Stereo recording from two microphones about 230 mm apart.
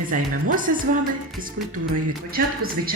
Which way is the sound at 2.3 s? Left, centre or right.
Right.